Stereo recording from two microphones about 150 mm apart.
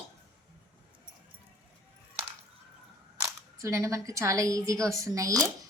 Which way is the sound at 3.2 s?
20° right (ahead or behind).